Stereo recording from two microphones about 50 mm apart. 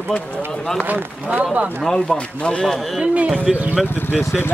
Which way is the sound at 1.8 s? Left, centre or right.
Centre.